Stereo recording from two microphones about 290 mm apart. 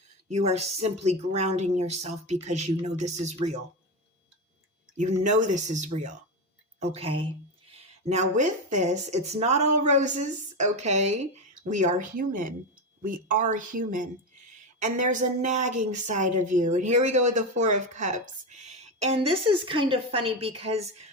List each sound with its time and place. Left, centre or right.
0.3 s a woman's voice: right
5.4 s a woman's voice: right
8.4 s a woman's voice: right
15.2 s a woman's voice: right